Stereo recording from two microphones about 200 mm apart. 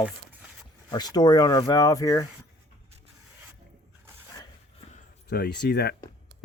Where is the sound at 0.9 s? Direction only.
20° left (ahead or behind).